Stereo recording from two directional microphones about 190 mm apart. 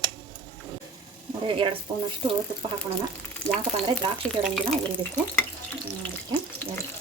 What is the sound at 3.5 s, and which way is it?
Speech, 5° left (ahead or behind).